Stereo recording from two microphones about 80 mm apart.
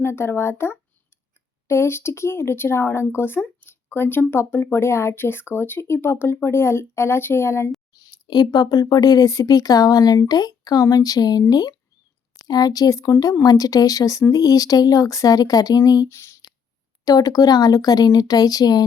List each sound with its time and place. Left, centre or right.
0.0 s speech: left
7.9 s speech: left
16.0 s speech: left
17.1 s speech: left